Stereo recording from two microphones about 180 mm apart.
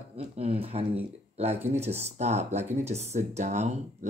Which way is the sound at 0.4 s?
35° right (ahead or behind).